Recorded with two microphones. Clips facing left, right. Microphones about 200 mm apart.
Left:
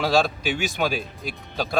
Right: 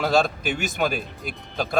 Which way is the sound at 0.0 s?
Centre (ahead or behind).